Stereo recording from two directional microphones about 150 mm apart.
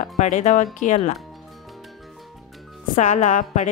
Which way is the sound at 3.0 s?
55° left (ahead or behind).